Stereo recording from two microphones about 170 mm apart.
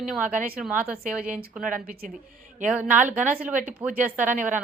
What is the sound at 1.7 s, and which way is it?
Speech, 55° right (ahead or behind).